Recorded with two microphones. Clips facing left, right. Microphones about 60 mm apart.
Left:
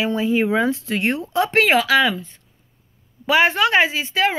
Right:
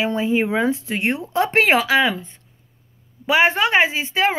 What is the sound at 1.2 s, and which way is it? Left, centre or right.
A woman's voice, right.